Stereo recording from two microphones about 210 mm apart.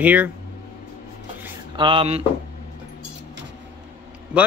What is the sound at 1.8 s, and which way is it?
Speech, 25° right (ahead or behind).